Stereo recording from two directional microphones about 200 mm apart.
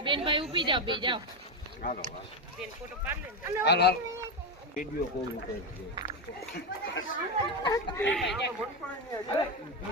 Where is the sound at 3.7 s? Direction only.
55° left (ahead or behind).